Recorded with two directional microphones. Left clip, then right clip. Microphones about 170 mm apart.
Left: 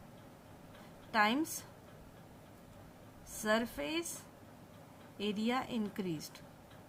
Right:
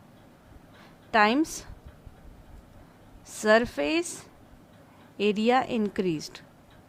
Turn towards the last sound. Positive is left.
turn(degrees=-45)  # may be behind; listen again after turning